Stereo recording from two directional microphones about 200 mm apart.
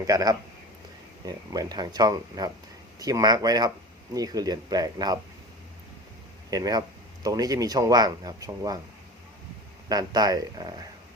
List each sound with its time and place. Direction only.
0.1 s speech: 20° right (ahead or behind)
1.5 s speech: 20° right (ahead or behind)
6.5 s speech: 20° right (ahead or behind)
9.9 s speech: 20° right (ahead or behind)